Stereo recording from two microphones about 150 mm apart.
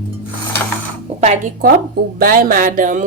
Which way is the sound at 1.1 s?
40° right (ahead or behind).